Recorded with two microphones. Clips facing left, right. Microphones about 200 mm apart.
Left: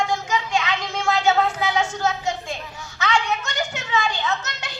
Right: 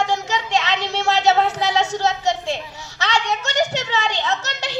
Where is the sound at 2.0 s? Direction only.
75° right (ahead or behind).